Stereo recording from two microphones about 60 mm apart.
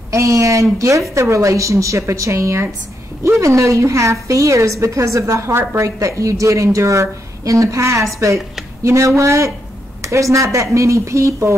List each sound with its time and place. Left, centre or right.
0.1 s a woman's voice: right
5.8 s a woman's voice: right